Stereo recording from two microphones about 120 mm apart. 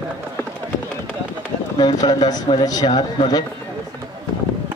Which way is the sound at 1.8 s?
35° left (ahead or behind).